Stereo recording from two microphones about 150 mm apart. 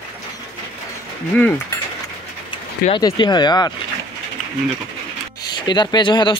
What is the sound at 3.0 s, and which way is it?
Speech, 30° left (ahead or behind).